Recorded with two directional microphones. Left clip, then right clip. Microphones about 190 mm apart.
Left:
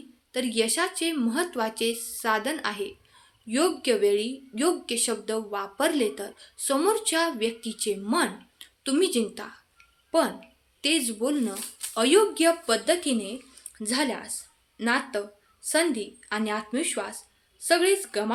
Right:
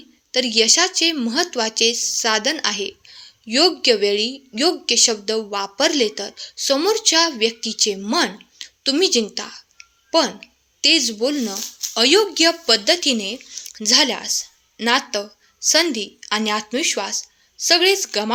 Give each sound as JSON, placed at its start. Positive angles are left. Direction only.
{"t": 0.3, "sound": "speech", "side_deg": -25}